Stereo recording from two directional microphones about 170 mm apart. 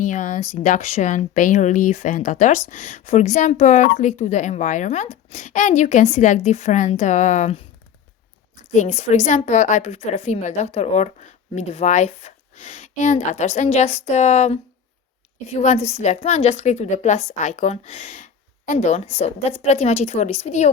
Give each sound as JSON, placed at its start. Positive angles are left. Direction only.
{"t": 0.0, "sound": "speech", "side_deg": 45}
{"t": 8.7, "sound": "a woman's voice", "side_deg": 45}